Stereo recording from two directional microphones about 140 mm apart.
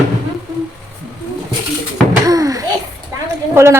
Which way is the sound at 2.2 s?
25° right (ahead or behind).